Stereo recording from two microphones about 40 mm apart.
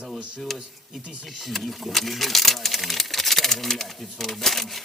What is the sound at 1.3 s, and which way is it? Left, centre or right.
Speech, centre.